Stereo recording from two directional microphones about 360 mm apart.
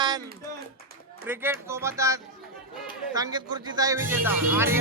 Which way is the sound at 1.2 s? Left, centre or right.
Centre.